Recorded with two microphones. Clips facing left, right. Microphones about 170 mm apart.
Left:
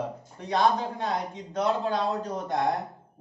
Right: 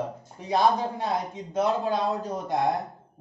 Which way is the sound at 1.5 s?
5° right (ahead or behind).